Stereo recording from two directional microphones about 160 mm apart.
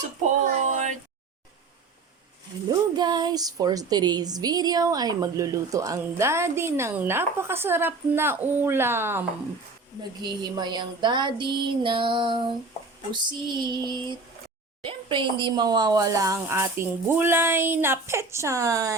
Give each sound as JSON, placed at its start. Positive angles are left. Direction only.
{"t": 2.6, "sound": "speech", "side_deg": -25}
{"t": 10.0, "sound": "speech", "side_deg": -25}